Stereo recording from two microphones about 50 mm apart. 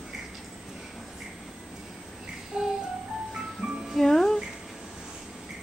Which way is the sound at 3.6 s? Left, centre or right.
Centre.